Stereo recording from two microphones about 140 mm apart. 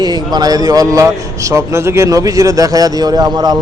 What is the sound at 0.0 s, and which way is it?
A man's voice, 30° right (ahead or behind).